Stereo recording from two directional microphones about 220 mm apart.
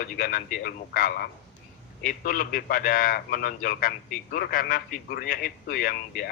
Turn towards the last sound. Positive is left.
turn(degrees=40)  # may be behind; listen again after turning